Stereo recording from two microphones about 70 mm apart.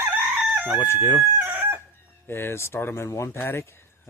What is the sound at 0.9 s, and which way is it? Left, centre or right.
Speech, left.